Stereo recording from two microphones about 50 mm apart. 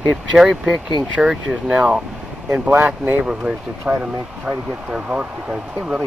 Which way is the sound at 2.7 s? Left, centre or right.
Right.